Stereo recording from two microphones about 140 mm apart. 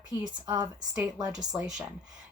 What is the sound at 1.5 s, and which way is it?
Speech, 5° right (ahead or behind).